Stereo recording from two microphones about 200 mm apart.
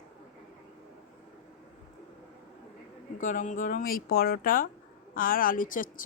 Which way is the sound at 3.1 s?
40° left (ahead or behind).